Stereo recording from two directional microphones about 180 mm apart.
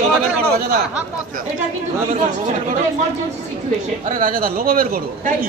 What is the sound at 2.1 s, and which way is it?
Speech, 40° right (ahead or behind).